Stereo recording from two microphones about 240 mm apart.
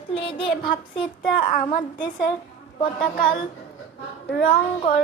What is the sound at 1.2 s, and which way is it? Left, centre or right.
Child singing, left.